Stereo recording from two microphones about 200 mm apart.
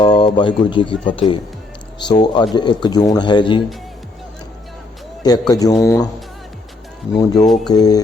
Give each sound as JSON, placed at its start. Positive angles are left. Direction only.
{"t": 0.0, "sound": "speech", "side_deg": 25}
{"t": 2.0, "sound": "speech", "side_deg": 20}
{"t": 5.2, "sound": "speech", "side_deg": 20}
{"t": 7.2, "sound": "speech", "side_deg": 20}
{"t": 7.4, "sound": "speech", "side_deg": 0}
{"t": 7.7, "sound": "speech", "side_deg": 20}